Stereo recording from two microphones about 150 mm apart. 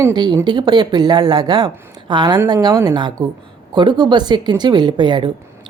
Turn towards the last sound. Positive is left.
turn(degrees=-30)  # may be behind; listen again after turning